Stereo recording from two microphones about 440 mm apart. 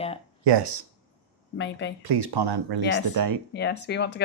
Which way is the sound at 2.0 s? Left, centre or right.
Right.